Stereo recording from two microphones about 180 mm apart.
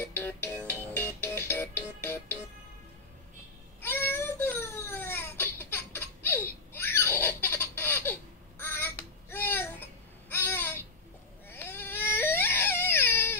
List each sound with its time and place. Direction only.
0.0 s music: 10° left (ahead or behind)
3.8 s baby cry: 10° left (ahead or behind)
10.3 s a sound: 10° left (ahead or behind)
11.4 s baby cry: 10° left (ahead or behind)